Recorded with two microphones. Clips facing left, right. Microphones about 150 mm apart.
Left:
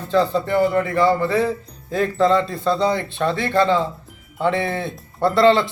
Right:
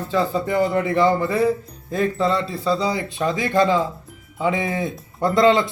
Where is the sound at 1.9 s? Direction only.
Centre (ahead or behind).